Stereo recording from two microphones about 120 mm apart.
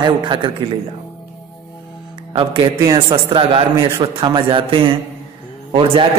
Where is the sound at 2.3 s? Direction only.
45° right (ahead or behind).